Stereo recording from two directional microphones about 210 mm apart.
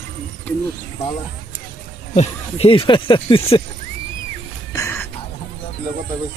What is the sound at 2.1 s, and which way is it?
Speech, 30° left (ahead or behind).